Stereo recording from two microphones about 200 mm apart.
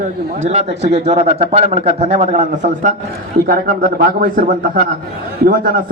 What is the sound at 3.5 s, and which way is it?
A man's voice, 45° right (ahead or behind).